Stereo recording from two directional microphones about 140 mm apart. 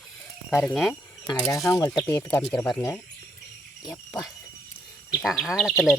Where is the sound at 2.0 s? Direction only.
20° left (ahead or behind).